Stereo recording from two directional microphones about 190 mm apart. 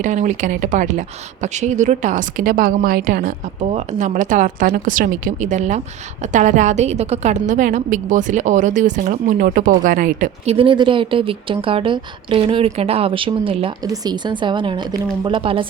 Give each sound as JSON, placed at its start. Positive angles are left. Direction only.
{"t": 0.0, "sound": "speech", "side_deg": -40}